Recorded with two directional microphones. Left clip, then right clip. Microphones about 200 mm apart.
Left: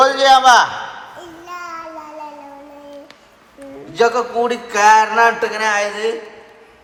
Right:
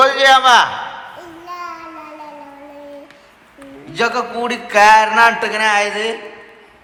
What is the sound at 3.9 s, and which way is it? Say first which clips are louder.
A man's voice: left 2 dB; 10° left (ahead or behind).